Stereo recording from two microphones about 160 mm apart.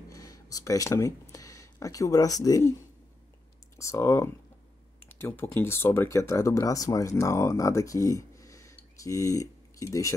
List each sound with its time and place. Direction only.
0.1 s speech: 20° left (ahead or behind)
3.7 s speech: 15° left (ahead or behind)